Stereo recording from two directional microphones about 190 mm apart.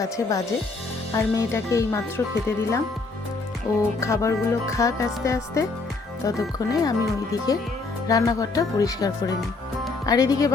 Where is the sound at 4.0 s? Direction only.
15° left (ahead or behind).